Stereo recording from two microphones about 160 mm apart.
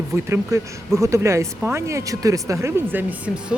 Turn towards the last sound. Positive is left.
turn(degrees=-10)  # may be behind; listen again after turning